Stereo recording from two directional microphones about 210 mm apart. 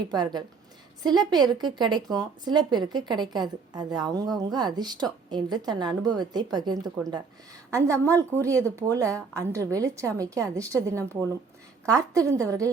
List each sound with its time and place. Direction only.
0.1 s a woman's voice: 20° right (ahead or behind)